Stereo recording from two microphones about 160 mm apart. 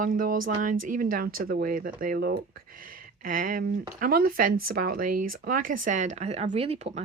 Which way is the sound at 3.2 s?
60° right (ahead or behind).